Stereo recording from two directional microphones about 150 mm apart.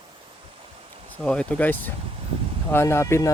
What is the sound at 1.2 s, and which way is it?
Speech, 5° left (ahead or behind).